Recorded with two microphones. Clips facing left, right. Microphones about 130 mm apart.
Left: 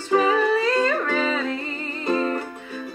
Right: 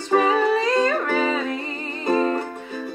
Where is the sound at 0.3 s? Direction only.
20° right (ahead or behind).